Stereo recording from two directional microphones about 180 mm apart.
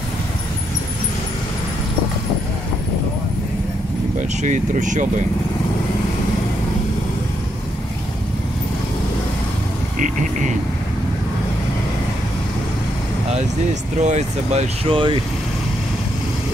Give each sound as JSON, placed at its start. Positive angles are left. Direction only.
{"t": 4.4, "sound": "speech", "side_deg": -45}
{"t": 9.9, "sound": "speech", "side_deg": -45}
{"t": 14.0, "sound": "speech", "side_deg": -40}